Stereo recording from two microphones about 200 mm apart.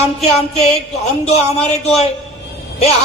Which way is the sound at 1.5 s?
30° left (ahead or behind).